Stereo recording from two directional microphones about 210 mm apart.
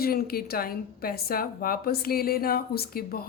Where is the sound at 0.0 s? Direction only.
45° left (ahead or behind).